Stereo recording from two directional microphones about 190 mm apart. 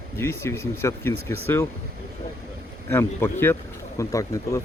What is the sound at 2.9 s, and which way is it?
Speech, 10° left (ahead or behind).